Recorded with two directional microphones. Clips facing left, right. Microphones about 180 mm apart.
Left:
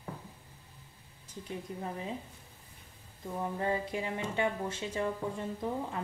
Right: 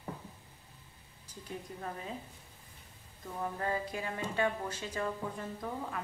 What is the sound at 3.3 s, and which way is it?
Speech, 20° left (ahead or behind).